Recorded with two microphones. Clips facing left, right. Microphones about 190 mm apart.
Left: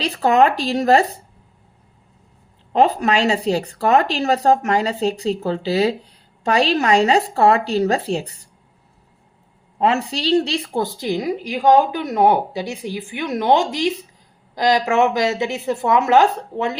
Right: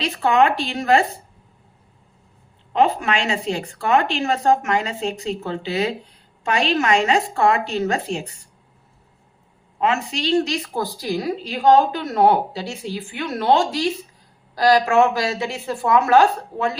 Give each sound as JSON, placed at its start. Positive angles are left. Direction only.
{"t": 0.0, "sound": "speech", "side_deg": 35}
{"t": 2.7, "sound": "speech", "side_deg": 40}
{"t": 9.7, "sound": "a woman's voice", "side_deg": 35}